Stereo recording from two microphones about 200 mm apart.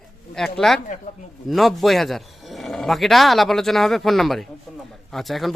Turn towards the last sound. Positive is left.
turn(degrees=0)  # may be behind; listen again after turning